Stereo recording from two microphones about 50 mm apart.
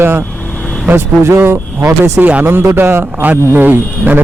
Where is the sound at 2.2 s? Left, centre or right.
Right.